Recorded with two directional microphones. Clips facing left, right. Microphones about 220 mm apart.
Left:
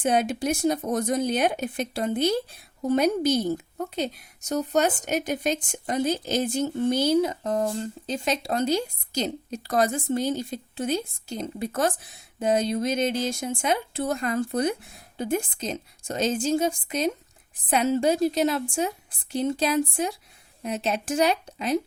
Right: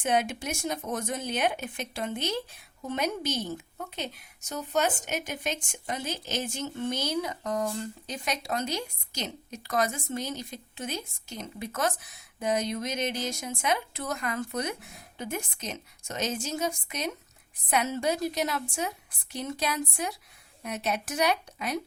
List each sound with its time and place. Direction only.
0.0 s a woman's voice: 35° left (ahead or behind)